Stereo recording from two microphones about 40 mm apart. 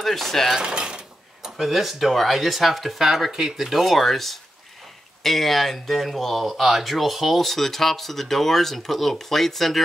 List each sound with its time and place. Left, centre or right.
0.0 s speech: centre
0.6 s speech: centre
1.4 s speech: centre